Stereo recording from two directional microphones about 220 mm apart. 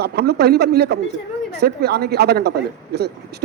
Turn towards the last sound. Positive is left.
turn(degrees=-50)  # may be behind; listen again after turning